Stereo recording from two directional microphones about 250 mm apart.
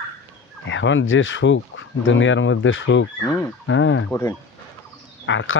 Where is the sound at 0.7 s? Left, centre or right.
Left.